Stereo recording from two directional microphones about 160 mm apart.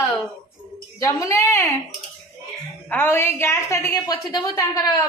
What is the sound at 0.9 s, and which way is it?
Speech, 20° left (ahead or behind).